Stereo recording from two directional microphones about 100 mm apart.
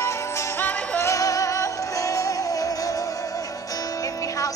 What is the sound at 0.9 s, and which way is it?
Music, 30° left (ahead or behind).